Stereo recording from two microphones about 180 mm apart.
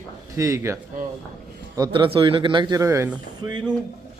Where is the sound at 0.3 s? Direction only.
15° right (ahead or behind).